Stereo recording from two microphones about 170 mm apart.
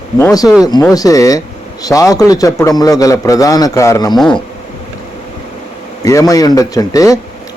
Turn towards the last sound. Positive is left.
turn(degrees=20)  # may be behind; listen again after turning